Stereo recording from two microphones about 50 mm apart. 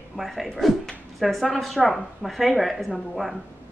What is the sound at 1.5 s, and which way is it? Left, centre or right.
Speech, centre.